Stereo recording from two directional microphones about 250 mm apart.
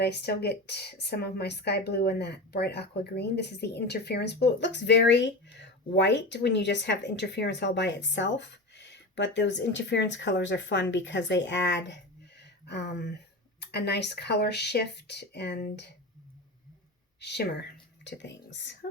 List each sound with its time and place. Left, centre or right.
0.0 s speech: left
12.4 s a sound: left
13.6 s speech: left
17.2 s a woman's voice: left